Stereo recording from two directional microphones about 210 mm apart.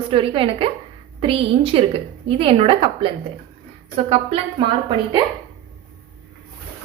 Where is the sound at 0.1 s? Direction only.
25° right (ahead or behind).